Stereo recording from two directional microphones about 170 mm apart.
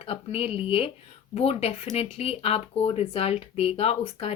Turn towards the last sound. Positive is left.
turn(degrees=35)  # may be behind; listen again after turning